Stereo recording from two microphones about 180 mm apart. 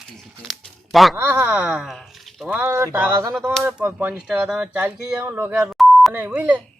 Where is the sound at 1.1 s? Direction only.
10° right (ahead or behind).